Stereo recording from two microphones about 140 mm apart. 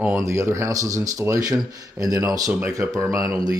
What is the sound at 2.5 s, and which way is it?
Speech, 10° right (ahead or behind).